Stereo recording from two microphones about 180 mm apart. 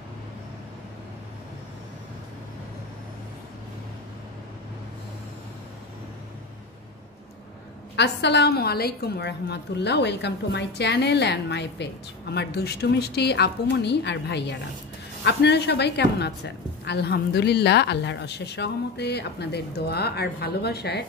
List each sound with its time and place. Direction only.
7.9 s a woman's voice: 70° left (ahead or behind)